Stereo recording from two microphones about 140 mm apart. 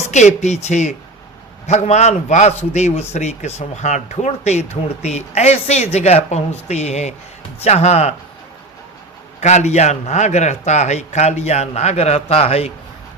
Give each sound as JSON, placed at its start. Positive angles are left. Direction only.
{"t": 0.1, "sound": "speech", "side_deg": 55}
{"t": 9.4, "sound": "speech", "side_deg": 55}